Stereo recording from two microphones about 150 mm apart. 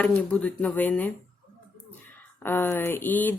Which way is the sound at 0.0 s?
5° left (ahead or behind).